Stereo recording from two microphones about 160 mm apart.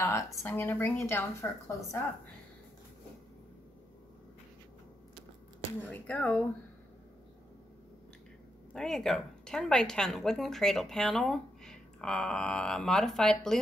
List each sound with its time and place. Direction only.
0.0 s a woman's voice: 20° left (ahead or behind)
5.8 s a woman's voice: 10° left (ahead or behind)
8.7 s a woman's voice: 5° left (ahead or behind)